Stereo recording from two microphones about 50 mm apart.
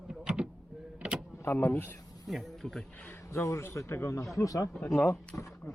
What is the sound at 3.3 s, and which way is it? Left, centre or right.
Speech, left.